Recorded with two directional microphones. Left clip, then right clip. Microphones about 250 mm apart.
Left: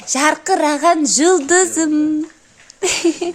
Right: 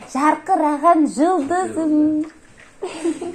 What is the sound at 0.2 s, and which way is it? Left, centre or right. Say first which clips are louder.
A woman's voice: left 1 dB; left.